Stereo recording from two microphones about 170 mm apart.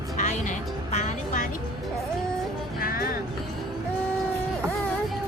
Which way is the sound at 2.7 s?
60° left (ahead or behind).